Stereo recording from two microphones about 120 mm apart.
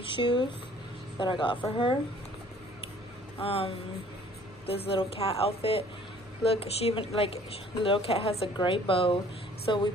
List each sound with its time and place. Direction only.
0.0 s a woman's voice: 40° left (ahead or behind)
3.3 s a woman's voice: 55° left (ahead or behind)